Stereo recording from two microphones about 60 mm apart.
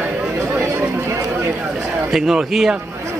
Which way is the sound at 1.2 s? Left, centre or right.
Right.